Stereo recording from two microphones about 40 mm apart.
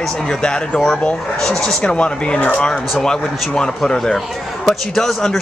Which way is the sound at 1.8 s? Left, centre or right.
Left.